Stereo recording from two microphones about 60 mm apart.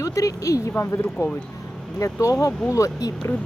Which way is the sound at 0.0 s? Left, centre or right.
Left.